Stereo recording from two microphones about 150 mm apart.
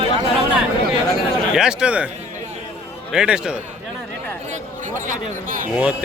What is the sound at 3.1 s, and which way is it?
Speech, 5° right (ahead or behind).